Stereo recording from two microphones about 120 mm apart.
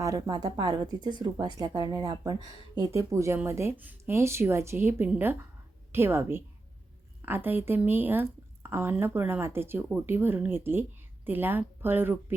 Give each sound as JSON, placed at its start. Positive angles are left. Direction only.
{"t": 0.0, "sound": "speech", "side_deg": -30}